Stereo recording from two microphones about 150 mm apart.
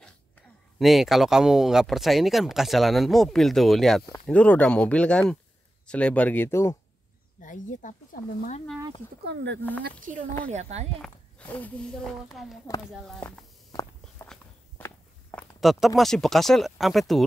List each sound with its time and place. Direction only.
0.7 s speech: centre (ahead or behind); by 6.8 s 20° left (ahead or behind)
7.4 s speech: 60° left (ahead or behind)
10.4 s speech: 50° right (ahead or behind)
11.0 s speech: 10° left (ahead or behind)
13.7 s walk: 20° left (ahead or behind)
15.3 s a sound: centre (ahead or behind)
16.0 s speech: centre (ahead or behind)